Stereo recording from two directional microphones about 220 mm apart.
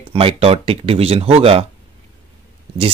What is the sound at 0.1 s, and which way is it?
Speech, 25° right (ahead or behind).